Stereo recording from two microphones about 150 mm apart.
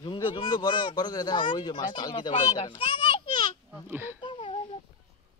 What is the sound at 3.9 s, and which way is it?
Speech, 15° right (ahead or behind).